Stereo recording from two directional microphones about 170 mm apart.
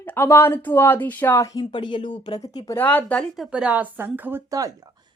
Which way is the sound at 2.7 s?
10° left (ahead or behind).